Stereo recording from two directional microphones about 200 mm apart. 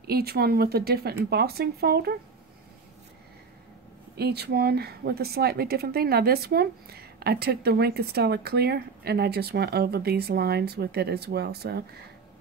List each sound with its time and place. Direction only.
0.0 s speech: 50° right (ahead or behind)
4.2 s speech: 55° right (ahead or behind)